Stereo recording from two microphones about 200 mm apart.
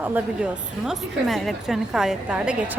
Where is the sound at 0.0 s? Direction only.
5° right (ahead or behind).